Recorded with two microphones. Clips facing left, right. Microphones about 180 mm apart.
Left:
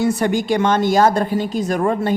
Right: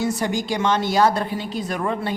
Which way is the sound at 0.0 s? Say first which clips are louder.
Left 5 dB; 60° left (ahead or behind).